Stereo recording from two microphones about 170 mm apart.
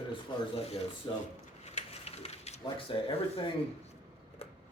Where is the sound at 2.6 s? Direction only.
30° left (ahead or behind).